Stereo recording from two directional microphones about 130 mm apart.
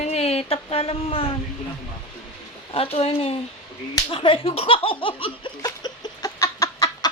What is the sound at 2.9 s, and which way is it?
Speech, 50° left (ahead or behind).